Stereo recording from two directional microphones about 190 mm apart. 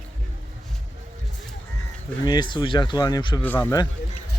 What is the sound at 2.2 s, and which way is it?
Speech, 20° left (ahead or behind).